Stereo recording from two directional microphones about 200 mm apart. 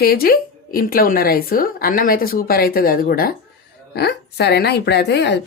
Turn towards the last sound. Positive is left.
turn(degrees=60)  # may be behind; listen again after turning